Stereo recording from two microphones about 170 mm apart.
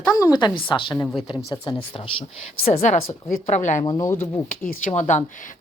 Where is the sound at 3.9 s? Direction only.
20° left (ahead or behind).